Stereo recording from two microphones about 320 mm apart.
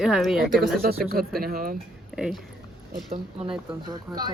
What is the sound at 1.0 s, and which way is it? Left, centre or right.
Speech, right.